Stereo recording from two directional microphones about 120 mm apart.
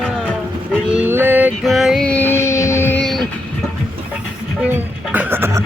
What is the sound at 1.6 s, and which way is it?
Music, centre (ahead or behind).